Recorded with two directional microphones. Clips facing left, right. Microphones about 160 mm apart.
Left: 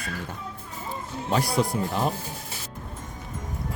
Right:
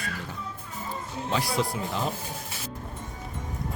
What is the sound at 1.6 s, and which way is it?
Speech, 50° left (ahead or behind).